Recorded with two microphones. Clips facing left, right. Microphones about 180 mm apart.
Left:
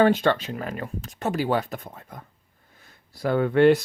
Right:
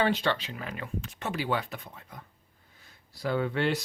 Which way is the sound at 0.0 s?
50° left (ahead or behind).